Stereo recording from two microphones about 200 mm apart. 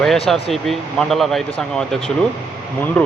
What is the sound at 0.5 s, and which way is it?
A man's voice, centre (ahead or behind).